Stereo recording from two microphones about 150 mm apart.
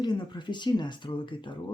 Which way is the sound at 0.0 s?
30° left (ahead or behind).